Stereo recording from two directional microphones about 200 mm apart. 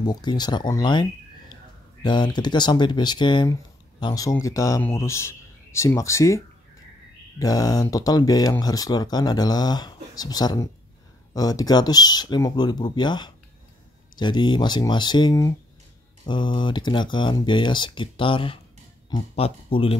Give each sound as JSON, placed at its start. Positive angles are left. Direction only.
{"t": 0.0, "sound": "speech", "side_deg": 20}
{"t": 2.0, "sound": "a man's voice", "side_deg": 20}